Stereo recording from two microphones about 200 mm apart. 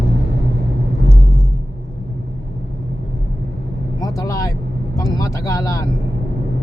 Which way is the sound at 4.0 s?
15° left (ahead or behind).